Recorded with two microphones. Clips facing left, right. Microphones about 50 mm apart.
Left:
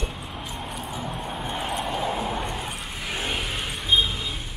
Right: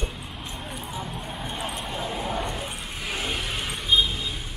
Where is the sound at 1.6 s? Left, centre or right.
Left.